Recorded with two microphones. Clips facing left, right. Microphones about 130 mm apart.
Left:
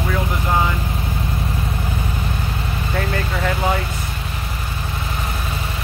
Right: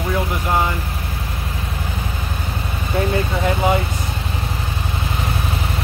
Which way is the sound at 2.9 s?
20° right (ahead or behind).